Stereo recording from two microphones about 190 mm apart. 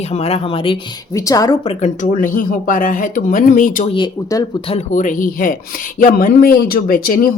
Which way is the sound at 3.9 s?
25° left (ahead or behind).